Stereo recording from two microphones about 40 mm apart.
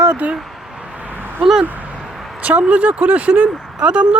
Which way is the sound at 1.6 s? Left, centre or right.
Right.